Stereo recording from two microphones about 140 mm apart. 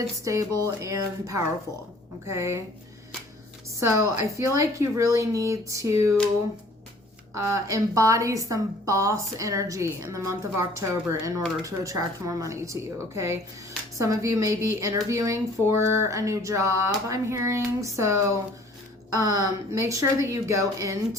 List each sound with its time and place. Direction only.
0.3 s speech: 20° right (ahead or behind)
3.8 s speech: 20° right (ahead or behind)
7.3 s speech: 20° right (ahead or behind)